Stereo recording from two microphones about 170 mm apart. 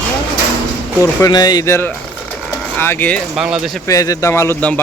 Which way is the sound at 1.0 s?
20° left (ahead or behind).